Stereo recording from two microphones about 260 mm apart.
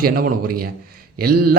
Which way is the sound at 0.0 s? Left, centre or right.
Right.